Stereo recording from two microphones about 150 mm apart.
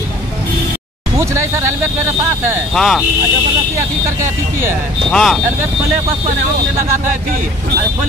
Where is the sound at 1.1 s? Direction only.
20° right (ahead or behind).